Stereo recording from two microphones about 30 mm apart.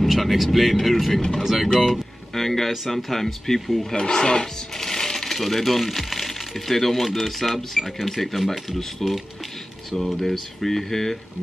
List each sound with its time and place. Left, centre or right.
0.0 s speech: centre
1.9 s speech: centre
2.7 s speech: centre
3.9 s speech: left; by 11.1 s centre